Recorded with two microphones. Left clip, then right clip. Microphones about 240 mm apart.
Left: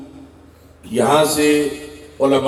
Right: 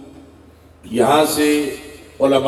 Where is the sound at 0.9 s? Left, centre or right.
Left.